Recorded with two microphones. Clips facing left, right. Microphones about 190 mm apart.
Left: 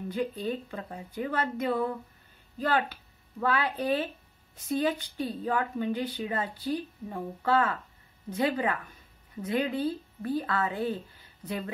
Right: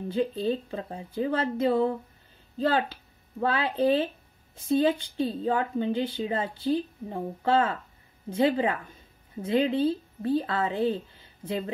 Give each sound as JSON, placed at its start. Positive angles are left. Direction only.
{"t": 0.1, "sound": "speech", "side_deg": -25}